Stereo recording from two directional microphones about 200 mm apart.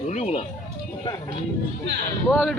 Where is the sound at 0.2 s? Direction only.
30° left (ahead or behind).